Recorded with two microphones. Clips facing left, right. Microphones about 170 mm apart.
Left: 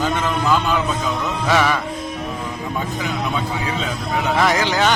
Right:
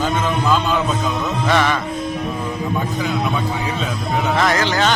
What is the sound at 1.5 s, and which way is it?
Speech, 5° left (ahead or behind).